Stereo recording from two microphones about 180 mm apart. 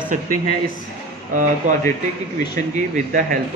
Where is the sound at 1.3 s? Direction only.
50° right (ahead or behind).